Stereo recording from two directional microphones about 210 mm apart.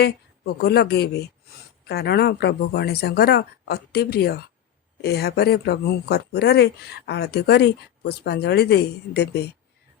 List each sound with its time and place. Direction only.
0.0 s speech: 50° left (ahead or behind)